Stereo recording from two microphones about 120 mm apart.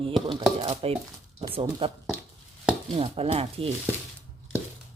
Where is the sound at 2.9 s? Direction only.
55° right (ahead or behind).